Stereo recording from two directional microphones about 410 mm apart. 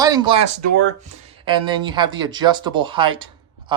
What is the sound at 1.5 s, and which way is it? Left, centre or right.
Speech, centre.